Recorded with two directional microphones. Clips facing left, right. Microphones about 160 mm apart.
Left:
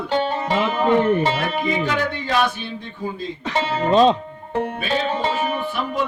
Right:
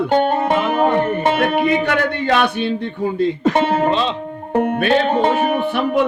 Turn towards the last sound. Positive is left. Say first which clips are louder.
# right 7 dB
turn(degrees=-60)  # may be behind; listen again after turning